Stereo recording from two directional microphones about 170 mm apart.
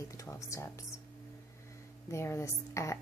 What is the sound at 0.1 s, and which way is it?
Speech, 20° left (ahead or behind).